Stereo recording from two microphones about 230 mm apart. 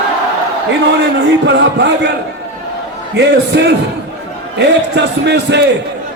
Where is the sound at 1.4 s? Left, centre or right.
Right.